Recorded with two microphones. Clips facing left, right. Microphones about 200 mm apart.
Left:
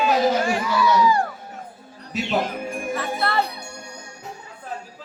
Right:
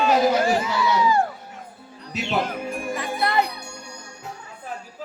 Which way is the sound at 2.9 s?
15° right (ahead or behind).